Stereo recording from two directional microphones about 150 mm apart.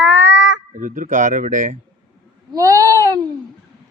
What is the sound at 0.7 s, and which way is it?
Speech, 60° right (ahead or behind).